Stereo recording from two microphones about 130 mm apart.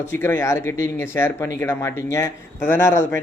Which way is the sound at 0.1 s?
15° left (ahead or behind).